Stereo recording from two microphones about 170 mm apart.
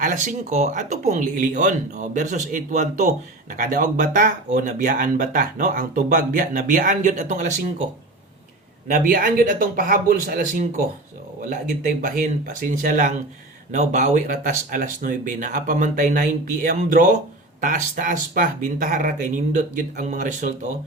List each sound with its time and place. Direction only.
0.0 s speech: 50° right (ahead or behind)
8.9 s speech: 50° right (ahead or behind)